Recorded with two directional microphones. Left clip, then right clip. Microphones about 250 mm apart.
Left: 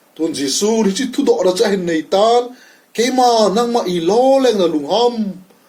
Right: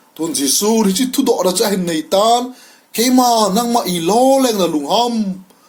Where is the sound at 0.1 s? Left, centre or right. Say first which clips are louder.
Right 1 dB; right.